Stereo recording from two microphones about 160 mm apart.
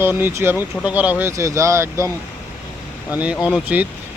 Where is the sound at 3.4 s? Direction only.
10° right (ahead or behind).